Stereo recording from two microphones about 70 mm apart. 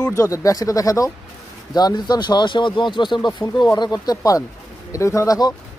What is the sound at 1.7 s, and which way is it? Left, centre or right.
Speech, left.